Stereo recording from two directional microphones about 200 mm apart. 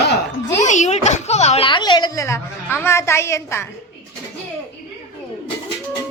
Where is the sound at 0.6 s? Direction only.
35° left (ahead or behind); by 3.7 s 15° left (ahead or behind).